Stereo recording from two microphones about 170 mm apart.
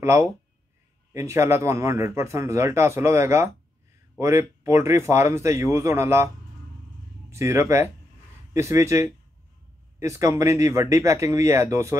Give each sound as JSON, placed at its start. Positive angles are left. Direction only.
{"t": 0.0, "sound": "speech", "side_deg": -15}